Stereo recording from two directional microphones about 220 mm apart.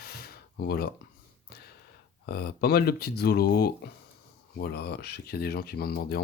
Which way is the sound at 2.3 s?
45° left (ahead or behind).